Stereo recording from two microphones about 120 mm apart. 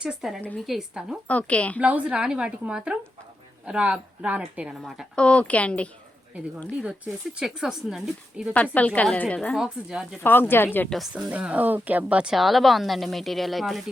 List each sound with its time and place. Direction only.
0.0 s speech: 5° right (ahead or behind)
1.3 s a woman's voice: 10° left (ahead or behind)
1.8 s speech: 10° right (ahead or behind)
5.1 s a woman's voice: 10° left (ahead or behind)
7.3 s speech: 5° right (ahead or behind)
8.5 s a woman's voice: 10° left (ahead or behind)
9.6 s speech: 5° right (ahead or behind)
10.2 s a woman's voice: 15° left (ahead or behind)
10.8 s speech: centre (ahead or behind)
11.1 s speech: 10° right (ahead or behind)